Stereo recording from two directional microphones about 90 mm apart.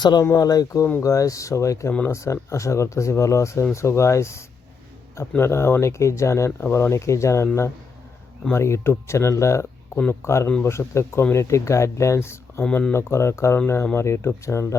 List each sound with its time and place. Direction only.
0.0 s speech: 50° left (ahead or behind); by 14.8 s 35° left (ahead or behind)